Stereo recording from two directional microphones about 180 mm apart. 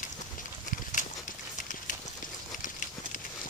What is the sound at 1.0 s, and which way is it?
Clip-clop, 45° left (ahead or behind).